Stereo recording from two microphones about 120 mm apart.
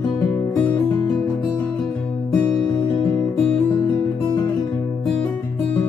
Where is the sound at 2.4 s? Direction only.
35° left (ahead or behind).